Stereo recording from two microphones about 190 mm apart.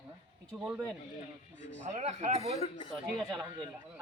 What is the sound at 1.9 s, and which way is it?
Speech, 40° right (ahead or behind).